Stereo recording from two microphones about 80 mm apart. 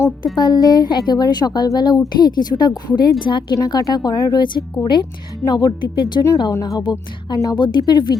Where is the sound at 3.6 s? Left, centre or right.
Left.